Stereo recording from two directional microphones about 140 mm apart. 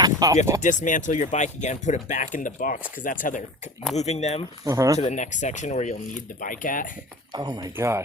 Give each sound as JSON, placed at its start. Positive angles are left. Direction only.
{"t": 0.0, "sound": "a sound", "side_deg": -25}
{"t": 0.6, "sound": "speech", "side_deg": 65}
{"t": 3.9, "sound": "speech", "side_deg": 55}
{"t": 4.6, "sound": "speech", "side_deg": -20}
{"t": 4.9, "sound": "speech", "side_deg": 60}
{"t": 7.3, "sound": "speech", "side_deg": -30}